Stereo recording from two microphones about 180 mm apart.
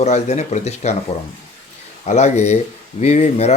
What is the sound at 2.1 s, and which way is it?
Speech, 40° left (ahead or behind).